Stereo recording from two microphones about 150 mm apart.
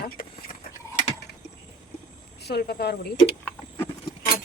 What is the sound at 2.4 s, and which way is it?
Speech, 90° left.